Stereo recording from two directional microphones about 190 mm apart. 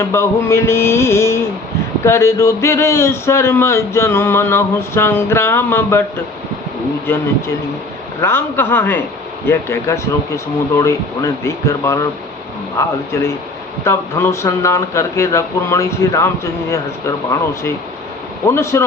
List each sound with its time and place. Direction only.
0.0 s speech: 15° left (ahead or behind)
8.2 s speech: 10° left (ahead or behind)